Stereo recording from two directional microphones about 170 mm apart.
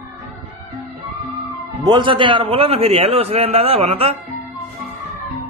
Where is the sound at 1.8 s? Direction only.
30° right (ahead or behind).